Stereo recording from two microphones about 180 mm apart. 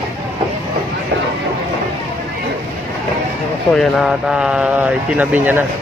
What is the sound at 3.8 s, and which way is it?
Speech, centre (ahead or behind).